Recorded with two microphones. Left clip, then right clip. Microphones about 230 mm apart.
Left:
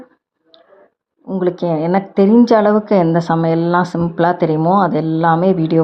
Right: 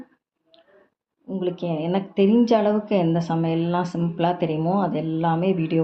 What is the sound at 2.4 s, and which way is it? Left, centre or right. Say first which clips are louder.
Speech: left 8 dB; left.